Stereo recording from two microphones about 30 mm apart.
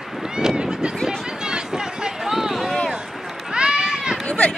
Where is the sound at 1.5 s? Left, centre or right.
Right.